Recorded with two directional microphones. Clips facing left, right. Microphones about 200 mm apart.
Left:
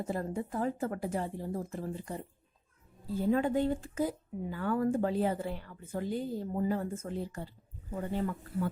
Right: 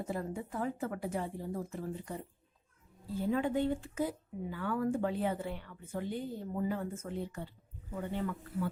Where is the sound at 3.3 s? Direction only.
40° left (ahead or behind).